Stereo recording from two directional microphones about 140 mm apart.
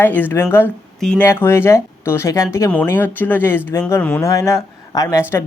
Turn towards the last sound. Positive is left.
turn(degrees=20)  # may be behind; listen again after turning